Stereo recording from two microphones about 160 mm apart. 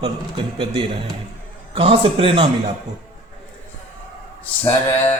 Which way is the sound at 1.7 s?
35° right (ahead or behind).